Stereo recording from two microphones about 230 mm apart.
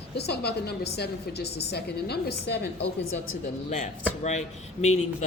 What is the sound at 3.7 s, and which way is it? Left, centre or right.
Speech, left.